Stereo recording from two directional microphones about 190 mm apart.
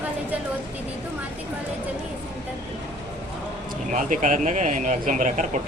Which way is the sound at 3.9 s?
45° right (ahead or behind).